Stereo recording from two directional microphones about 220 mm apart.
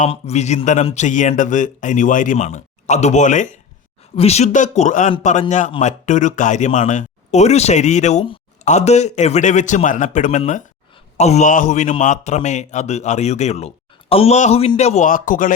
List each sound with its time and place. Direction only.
0.0 s speech: 30° left (ahead or behind)